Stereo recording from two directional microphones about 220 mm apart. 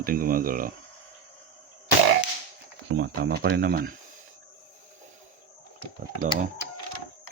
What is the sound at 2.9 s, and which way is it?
Speech, 50° right (ahead or behind).